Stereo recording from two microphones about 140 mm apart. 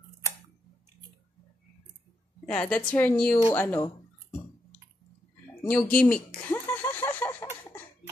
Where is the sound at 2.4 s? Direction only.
5° left (ahead or behind).